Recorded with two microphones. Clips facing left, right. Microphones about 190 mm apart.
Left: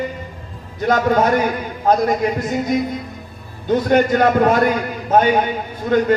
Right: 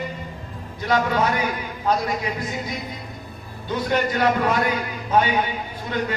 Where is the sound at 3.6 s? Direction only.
50° left (ahead or behind).